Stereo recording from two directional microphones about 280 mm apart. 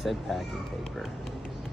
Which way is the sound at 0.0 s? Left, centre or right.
Centre.